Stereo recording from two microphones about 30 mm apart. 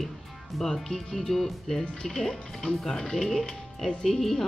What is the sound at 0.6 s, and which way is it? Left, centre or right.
Speech, centre.